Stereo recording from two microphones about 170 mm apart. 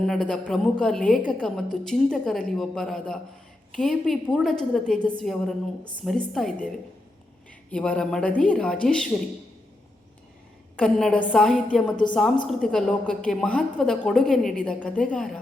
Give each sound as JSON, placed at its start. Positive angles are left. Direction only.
{"t": 0.0, "sound": "a woman's voice", "side_deg": 5}
{"t": 7.7, "sound": "a woman's voice", "side_deg": 5}
{"t": 10.8, "sound": "a woman's voice", "side_deg": 5}